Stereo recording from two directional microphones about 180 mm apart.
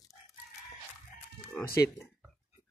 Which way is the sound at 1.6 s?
60° left (ahead or behind).